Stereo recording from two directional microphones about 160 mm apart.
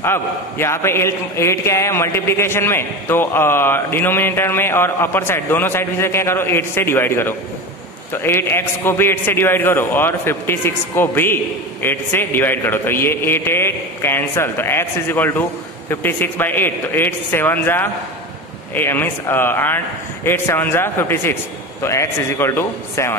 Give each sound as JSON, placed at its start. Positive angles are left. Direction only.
{"t": 0.0, "sound": "a man's voice", "side_deg": 15}